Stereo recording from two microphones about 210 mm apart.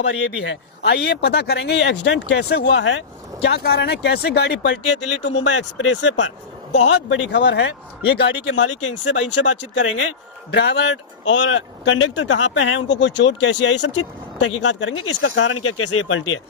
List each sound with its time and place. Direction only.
0.0 s speech: 60° left (ahead or behind)
6.7 s speech: 30° left (ahead or behind)
7.1 s speech: 60° left (ahead or behind)
10.5 s speech: 55° left (ahead or behind); by 16.2 s 85° left